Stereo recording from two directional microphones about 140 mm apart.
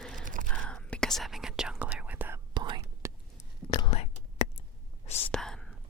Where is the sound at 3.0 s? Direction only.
20° right (ahead or behind).